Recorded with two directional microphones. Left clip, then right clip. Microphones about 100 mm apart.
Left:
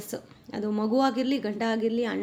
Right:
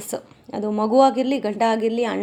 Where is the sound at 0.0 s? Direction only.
50° right (ahead or behind).